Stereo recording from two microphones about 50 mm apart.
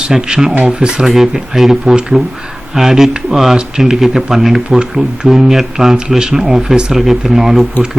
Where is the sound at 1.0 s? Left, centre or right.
Centre.